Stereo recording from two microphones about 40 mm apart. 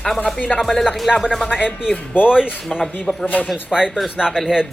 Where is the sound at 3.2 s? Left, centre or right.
Left.